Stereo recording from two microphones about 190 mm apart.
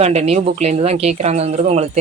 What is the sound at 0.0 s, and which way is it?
Speech, 35° right (ahead or behind).